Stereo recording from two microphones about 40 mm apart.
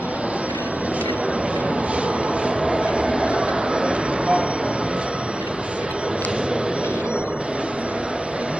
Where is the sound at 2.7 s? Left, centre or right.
Right.